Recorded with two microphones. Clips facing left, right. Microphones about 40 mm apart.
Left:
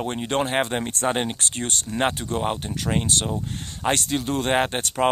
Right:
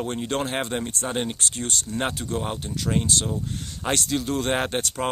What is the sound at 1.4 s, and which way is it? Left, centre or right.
Speech, left.